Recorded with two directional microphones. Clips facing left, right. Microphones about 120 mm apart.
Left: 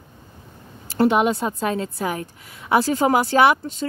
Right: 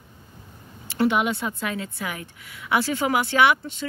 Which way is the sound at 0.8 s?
40° left (ahead or behind).